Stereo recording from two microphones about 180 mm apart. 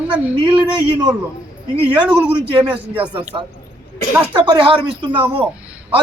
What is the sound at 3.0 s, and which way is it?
A man's voice, 30° right (ahead or behind).